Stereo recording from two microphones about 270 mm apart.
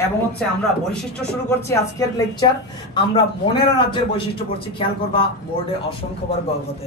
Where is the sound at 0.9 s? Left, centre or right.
Centre.